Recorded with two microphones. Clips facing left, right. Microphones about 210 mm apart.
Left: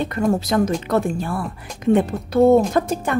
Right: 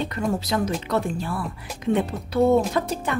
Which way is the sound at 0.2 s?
50° left (ahead or behind).